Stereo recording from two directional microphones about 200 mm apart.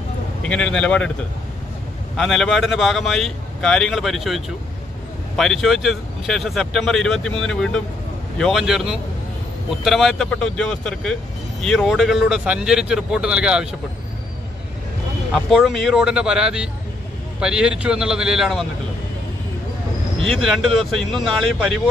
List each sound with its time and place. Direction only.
0.5 s speech: 5° left (ahead or behind)
2.1 s speech: centre (ahead or behind)
15.3 s speech: centre (ahead or behind)
20.3 s speech: centre (ahead or behind)